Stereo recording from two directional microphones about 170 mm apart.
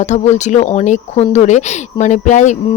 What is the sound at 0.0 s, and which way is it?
A woman's voice, 45° left (ahead or behind).